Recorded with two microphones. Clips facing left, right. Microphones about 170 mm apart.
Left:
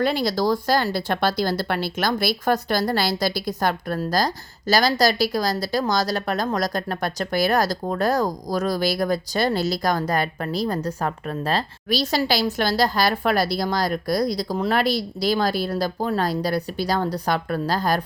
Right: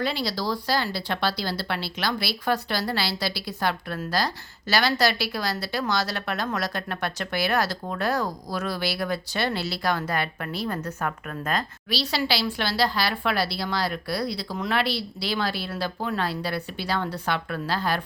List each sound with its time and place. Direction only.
0.0 s speech: 50° left (ahead or behind); by 11.6 s 30° left (ahead or behind)
11.9 s a woman's voice: 45° left (ahead or behind)